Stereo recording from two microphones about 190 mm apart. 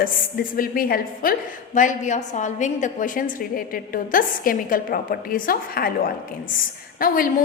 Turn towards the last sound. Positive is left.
turn(degrees=50)  # may be behind; listen again after turning